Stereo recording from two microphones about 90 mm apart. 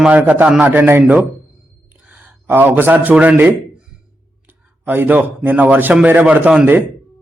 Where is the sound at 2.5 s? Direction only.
20° right (ahead or behind).